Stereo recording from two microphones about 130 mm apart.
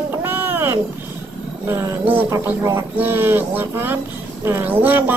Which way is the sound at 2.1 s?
25° right (ahead or behind).